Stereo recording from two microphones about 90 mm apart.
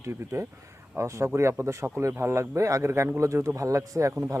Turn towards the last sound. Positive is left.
turn(degrees=-35)  # may be behind; listen again after turning